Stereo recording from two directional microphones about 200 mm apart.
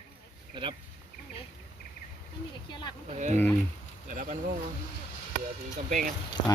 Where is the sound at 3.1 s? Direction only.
35° right (ahead or behind).